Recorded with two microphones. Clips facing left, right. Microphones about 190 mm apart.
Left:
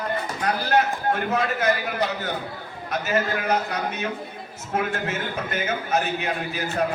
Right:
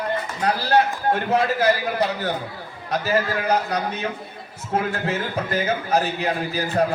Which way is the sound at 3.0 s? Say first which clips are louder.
Right 2 dB; 35° right (ahead or behind).